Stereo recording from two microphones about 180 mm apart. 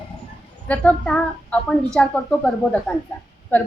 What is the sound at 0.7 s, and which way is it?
A woman's voice, 5° left (ahead or behind).